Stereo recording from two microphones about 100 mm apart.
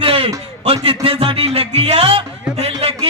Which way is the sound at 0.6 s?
70° right (ahead or behind).